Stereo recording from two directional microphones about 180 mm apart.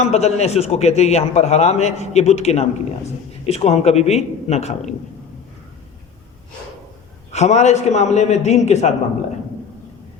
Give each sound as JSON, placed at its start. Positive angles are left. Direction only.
{"t": 0.0, "sound": "a man's voice", "side_deg": 35}
{"t": 7.3, "sound": "a man's voice", "side_deg": 40}